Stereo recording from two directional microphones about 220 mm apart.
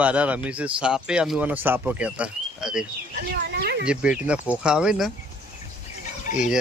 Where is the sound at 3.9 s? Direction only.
5° right (ahead or behind).